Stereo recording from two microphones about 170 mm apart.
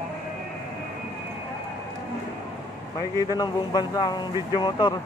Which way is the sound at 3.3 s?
25° left (ahead or behind).